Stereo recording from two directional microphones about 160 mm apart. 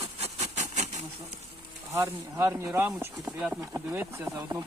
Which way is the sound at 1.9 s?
15° right (ahead or behind).